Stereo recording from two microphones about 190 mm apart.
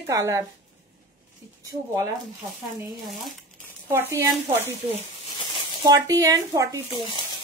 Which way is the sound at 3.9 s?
15° right (ahead or behind).